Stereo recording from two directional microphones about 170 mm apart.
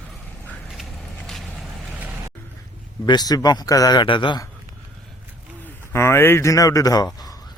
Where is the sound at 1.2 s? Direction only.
Centre (ahead or behind).